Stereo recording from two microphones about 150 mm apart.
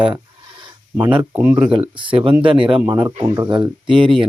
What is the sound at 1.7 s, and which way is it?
Speech, 35° right (ahead or behind).